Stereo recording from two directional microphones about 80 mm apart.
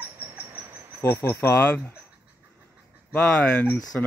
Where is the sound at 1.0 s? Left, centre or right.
Left.